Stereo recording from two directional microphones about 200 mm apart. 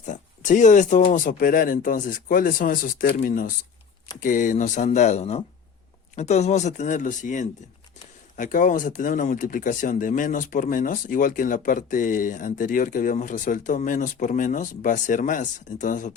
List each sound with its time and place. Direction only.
0.0 s speech: 40° left (ahead or behind)